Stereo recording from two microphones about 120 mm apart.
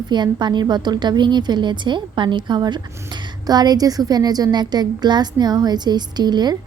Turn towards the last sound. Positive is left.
turn(degrees=-35)  # may be behind; listen again after turning